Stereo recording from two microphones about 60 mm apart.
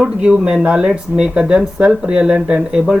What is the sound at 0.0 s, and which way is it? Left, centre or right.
Speech, centre.